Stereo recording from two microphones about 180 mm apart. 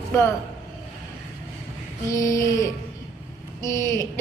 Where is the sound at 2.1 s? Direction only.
15° left (ahead or behind).